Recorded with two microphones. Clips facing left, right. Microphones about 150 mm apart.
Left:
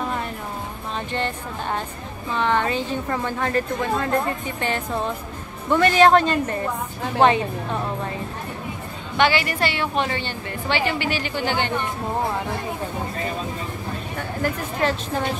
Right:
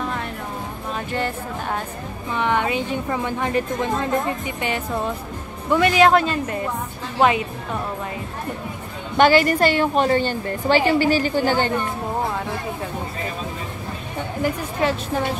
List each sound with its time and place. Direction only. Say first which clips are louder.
1.1 s a woman's voice: right 2 dB; 5° right (ahead or behind)
9.1 s a woman's voice: right 5 dB; 45° right (ahead or behind)
14.1 s speech: right 3 dB; 15° right (ahead or behind)